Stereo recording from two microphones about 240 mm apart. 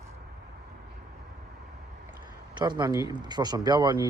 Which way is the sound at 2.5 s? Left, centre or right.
Centre.